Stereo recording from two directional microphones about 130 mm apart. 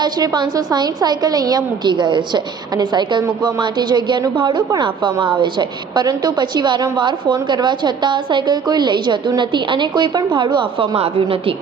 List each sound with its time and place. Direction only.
0.0 s a woman's voice: 30° right (ahead or behind)